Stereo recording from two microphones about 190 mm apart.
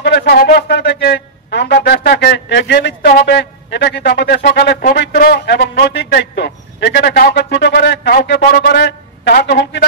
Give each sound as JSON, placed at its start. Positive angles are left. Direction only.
{"t": 0.0, "sound": "speech", "side_deg": 55}